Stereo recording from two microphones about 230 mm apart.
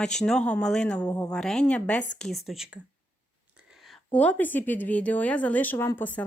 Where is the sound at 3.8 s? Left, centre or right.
Centre.